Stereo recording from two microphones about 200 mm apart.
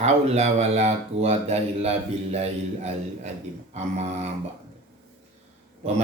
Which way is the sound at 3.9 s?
35° right (ahead or behind).